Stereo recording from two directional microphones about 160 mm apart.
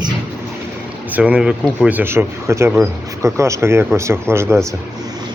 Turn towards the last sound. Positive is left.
turn(degrees=-15)  # may be behind; listen again after turning